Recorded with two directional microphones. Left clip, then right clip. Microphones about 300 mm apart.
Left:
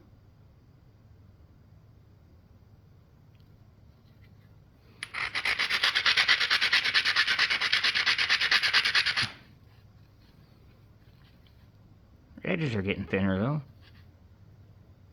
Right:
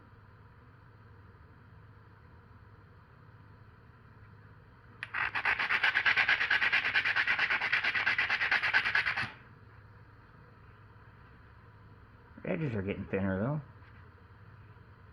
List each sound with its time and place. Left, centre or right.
5.1 s rub: left
12.4 s speech: left